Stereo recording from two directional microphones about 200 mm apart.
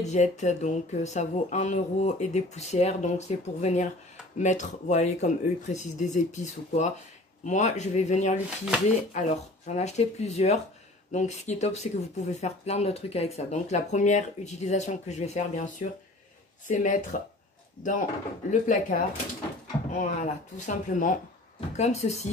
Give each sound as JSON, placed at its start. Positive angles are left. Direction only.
{"t": 0.0, "sound": "speech", "side_deg": 35}
{"t": 18.5, "sound": "speech", "side_deg": 40}